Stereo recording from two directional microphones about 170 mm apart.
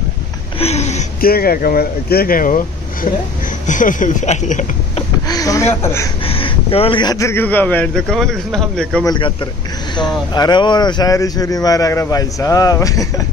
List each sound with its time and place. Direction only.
0.6 s a sound: 40° left (ahead or behind)
1.2 s speech: 60° left (ahead or behind); by 5.0 s 45° left (ahead or behind)
5.3 s speech: 20° left (ahead or behind)
6.2 s speech: 35° left (ahead or behind); by 9.0 s 5° left (ahead or behind)
9.0 s speech: 25° left (ahead or behind)